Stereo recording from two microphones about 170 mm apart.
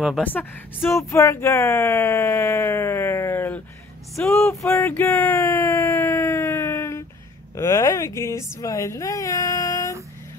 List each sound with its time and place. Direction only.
0.2 s speech: 10° left (ahead or behind)
4.6 s a sound: 15° left (ahead or behind)
7.5 s speech: 15° left (ahead or behind)